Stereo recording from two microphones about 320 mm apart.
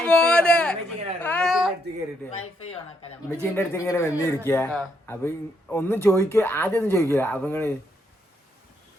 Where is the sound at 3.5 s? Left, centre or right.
Centre.